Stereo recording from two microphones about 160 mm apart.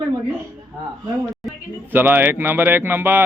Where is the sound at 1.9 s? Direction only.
10° right (ahead or behind).